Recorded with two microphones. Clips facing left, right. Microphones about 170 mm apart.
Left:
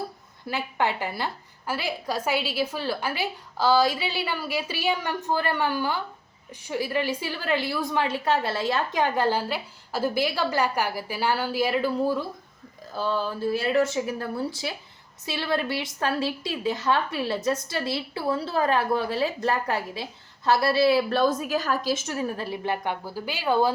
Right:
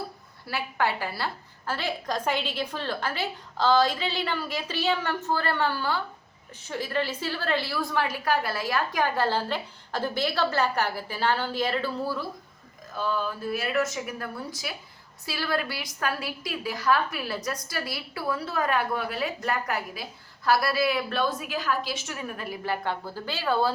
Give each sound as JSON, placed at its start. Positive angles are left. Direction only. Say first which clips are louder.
{"t": 0.4, "sound": "a woman's voice", "louder": "left 1 dB", "side_deg": 20}
{"t": 12.9, "sound": "a woman's voice", "louder": "left 2 dB", "side_deg": 30}